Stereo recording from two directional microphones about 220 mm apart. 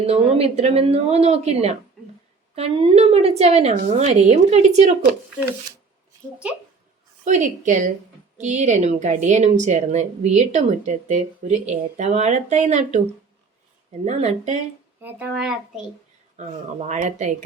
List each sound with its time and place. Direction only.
0.0 s a woman's voice: 25° right (ahead or behind)
2.0 s a sound: centre (ahead or behind)
2.6 s a woman's voice: 25° right (ahead or behind)
7.3 s a woman's voice: 35° right (ahead or behind)
14.0 s a woman's voice: 30° right (ahead or behind)
15.0 s a child's voice: 5° right (ahead or behind)
16.4 s a woman's voice: 30° right (ahead or behind)